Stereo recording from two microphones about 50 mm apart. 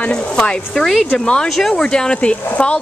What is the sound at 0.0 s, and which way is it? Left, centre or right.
Speech, centre.